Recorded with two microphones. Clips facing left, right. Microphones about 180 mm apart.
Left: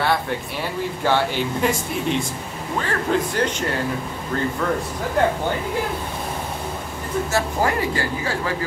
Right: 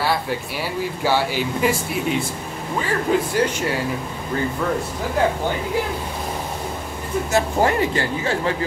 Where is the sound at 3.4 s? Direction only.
10° right (ahead or behind).